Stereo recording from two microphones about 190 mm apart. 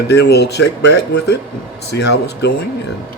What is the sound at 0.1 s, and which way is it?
Speech, 60° left (ahead or behind).